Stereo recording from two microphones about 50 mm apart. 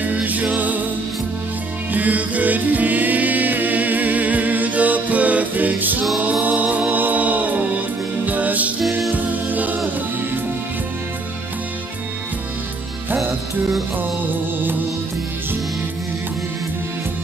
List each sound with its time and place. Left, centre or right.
0.0 s music: right
1.9 s music: right